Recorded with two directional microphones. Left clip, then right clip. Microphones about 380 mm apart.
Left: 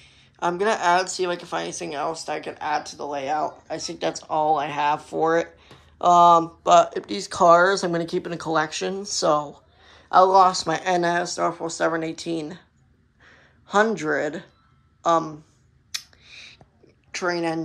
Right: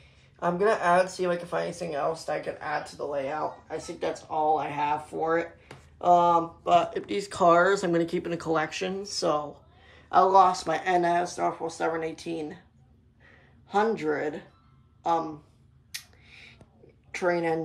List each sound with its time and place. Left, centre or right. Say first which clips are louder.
0.5 s speech: left 3 dB; centre
2.6 s speech: left 5 dB; left
4.7 s speech: left 5 dB; centre
13.7 s speech: left 5 dB; centre
15.9 s a sound: left 8 dB; centre
17.1 s a woman's voice: left 1 dB; centre